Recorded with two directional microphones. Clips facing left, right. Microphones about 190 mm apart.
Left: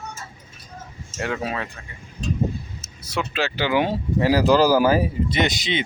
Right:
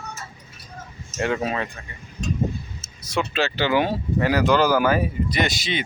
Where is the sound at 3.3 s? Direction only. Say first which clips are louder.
Even; 10° left (ahead or behind).